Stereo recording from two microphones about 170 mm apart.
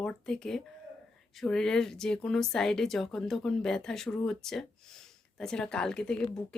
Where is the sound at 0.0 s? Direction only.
5° left (ahead or behind).